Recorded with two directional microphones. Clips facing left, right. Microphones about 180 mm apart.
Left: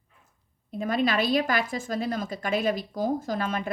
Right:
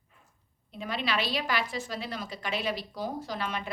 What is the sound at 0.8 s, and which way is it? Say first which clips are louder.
A woman's voice: left 7 dB; 45° left (ahead or behind).